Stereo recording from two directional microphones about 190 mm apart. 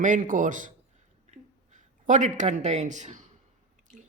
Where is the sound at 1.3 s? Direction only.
40° right (ahead or behind).